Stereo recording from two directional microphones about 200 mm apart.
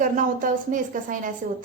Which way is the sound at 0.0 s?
40° right (ahead or behind).